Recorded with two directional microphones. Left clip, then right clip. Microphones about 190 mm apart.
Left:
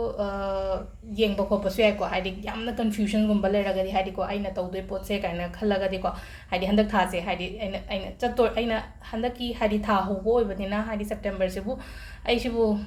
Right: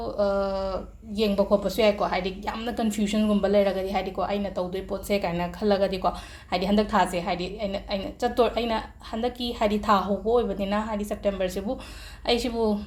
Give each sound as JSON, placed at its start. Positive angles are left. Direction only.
{"t": 0.0, "sound": "speech", "side_deg": -35}